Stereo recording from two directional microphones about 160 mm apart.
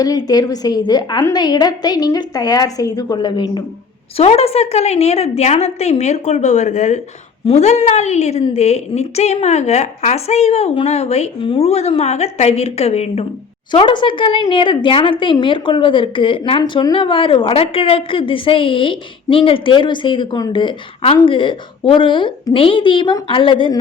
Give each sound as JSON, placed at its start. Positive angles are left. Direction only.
{"t": 0.0, "sound": "a woman's voice", "side_deg": 25}
{"t": 4.2, "sound": "a woman's voice", "side_deg": 40}
{"t": 13.7, "sound": "a woman's voice", "side_deg": 30}